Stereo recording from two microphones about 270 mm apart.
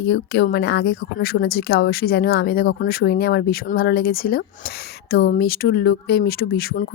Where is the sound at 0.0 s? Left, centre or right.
Left.